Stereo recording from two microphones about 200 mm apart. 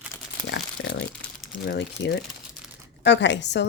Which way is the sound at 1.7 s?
60° left (ahead or behind).